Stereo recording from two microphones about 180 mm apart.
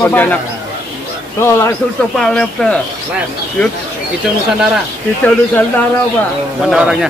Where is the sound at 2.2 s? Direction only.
5° left (ahead or behind).